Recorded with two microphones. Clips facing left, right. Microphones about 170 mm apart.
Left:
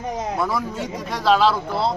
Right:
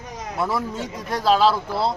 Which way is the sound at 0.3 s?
Centre (ahead or behind).